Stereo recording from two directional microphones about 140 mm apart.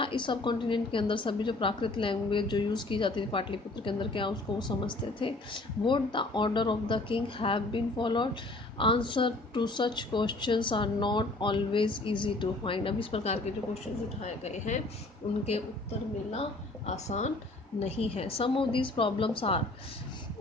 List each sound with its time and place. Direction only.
0.0 s a woman's voice: 35° left (ahead or behind)
16.8 s a woman's voice: 50° left (ahead or behind)